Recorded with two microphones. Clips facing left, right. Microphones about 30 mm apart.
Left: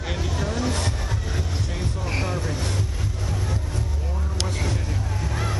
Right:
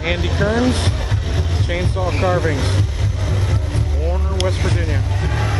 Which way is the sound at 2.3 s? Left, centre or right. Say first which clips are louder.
Right 9 dB; right.